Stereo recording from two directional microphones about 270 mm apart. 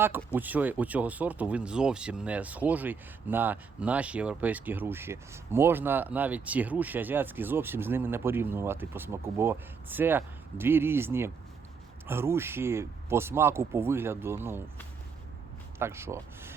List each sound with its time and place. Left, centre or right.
0.3 s speech: centre
15.8 s speech: centre